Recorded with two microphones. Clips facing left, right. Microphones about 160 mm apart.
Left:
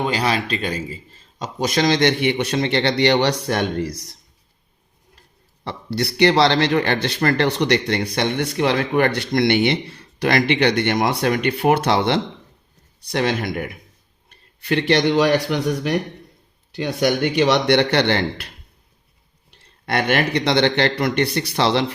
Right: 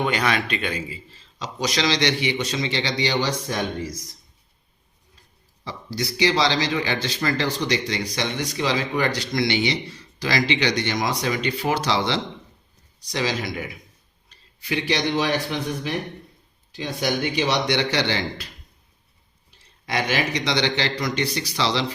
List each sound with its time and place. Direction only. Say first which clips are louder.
0.0 s speech: left 2 dB; 35° left (ahead or behind); by 4.2 s 65° left (ahead or behind)
5.6 s speech: left 5 dB; 65° left (ahead or behind)